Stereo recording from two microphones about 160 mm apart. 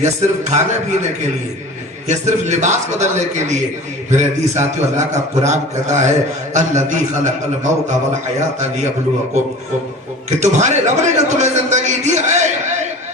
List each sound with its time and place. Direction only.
0.0 s a man's voice: 50° right (ahead or behind)
2.0 s a man's voice: 45° right (ahead or behind)
10.2 s a man's voice: 45° right (ahead or behind)